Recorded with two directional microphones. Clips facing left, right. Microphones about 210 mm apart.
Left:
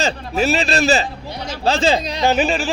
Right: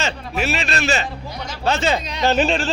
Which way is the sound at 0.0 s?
35° left (ahead or behind).